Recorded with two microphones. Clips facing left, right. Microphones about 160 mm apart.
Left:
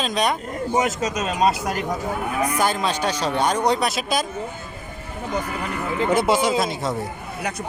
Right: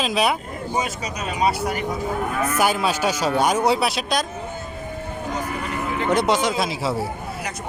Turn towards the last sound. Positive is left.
turn(degrees=-5)  # may be behind; listen again after turning